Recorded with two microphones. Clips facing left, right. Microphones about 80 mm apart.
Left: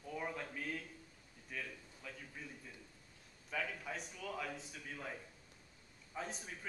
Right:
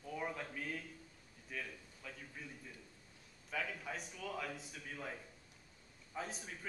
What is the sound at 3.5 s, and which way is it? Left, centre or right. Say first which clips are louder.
A man's voice: even; centre.